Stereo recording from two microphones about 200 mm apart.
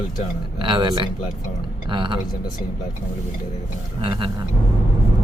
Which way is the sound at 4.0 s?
25° right (ahead or behind).